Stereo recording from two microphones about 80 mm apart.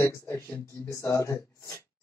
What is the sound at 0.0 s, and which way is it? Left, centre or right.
Speech, left.